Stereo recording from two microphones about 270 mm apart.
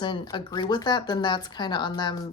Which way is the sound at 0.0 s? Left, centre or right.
Centre.